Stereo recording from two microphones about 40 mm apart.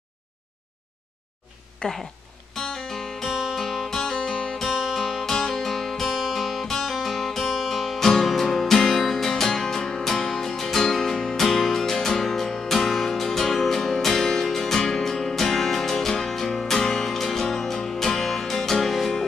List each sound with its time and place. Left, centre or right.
1.8 s a sound: left
2.5 s music: centre
3.3 s music: centre
3.5 s music: centre
4.6 s music: centre